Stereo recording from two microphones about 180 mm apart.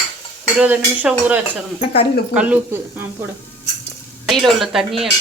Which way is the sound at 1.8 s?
30° left (ahead or behind).